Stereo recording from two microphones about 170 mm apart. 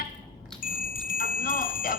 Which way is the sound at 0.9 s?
55° left (ahead or behind).